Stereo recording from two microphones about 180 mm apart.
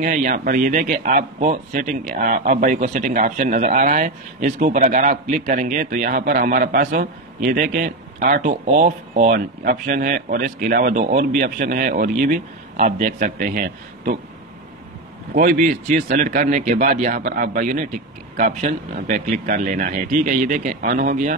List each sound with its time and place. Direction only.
0.0 s speech: 45° right (ahead or behind)
15.3 s speech: 45° right (ahead or behind)